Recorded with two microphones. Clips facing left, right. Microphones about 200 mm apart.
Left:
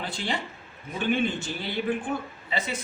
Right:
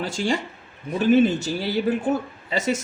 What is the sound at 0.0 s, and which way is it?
Speech, 45° right (ahead or behind).